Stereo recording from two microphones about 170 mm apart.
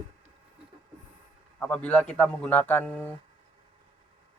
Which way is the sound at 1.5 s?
5° left (ahead or behind).